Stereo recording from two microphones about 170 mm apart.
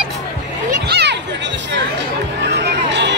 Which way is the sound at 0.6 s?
70° right (ahead or behind).